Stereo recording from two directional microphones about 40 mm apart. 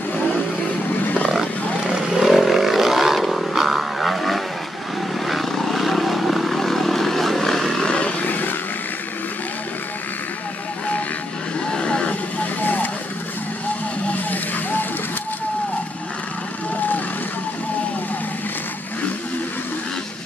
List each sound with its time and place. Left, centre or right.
2.1 s vehicle: centre
7.8 s vehicle: left
8.2 s vehicle: left
11.6 s a sound: left
12.6 s vehicle: left
14.1 s vehicle: left